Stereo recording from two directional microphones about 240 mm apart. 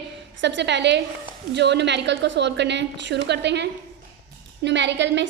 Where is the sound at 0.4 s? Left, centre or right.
Right.